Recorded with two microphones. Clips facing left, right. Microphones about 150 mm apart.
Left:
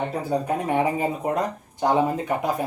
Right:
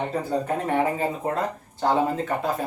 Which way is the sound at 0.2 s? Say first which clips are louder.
Left 1 dB; 10° left (ahead or behind).